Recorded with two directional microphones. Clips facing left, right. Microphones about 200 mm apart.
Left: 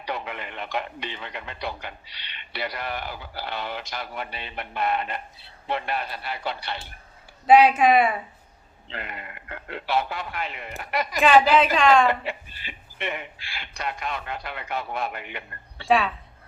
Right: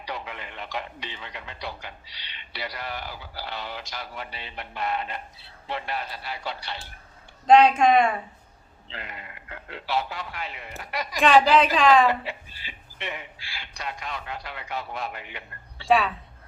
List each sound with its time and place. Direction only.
0.0 s speech: 55° left (ahead or behind)
7.4 s a woman's voice: 5° left (ahead or behind)
8.9 s speech: 60° left (ahead or behind)
11.2 s a woman's voice: centre (ahead or behind)
12.2 s speech: 55° left (ahead or behind)
15.9 s a woman's voice: centre (ahead or behind)